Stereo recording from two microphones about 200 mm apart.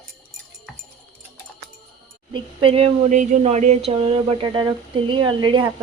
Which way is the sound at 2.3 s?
25° right (ahead or behind).